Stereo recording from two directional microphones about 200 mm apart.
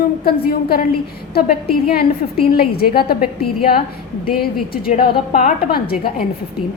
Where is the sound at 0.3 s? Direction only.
50° left (ahead or behind).